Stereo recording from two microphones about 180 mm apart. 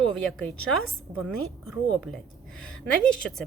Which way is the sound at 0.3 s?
Centre (ahead or behind).